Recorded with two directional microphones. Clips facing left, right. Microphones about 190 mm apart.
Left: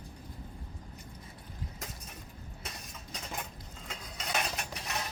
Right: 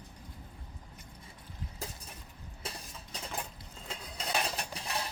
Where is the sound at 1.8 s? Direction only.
30° right (ahead or behind).